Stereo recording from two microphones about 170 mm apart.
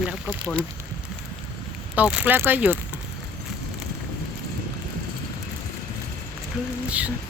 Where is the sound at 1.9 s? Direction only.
10° right (ahead or behind).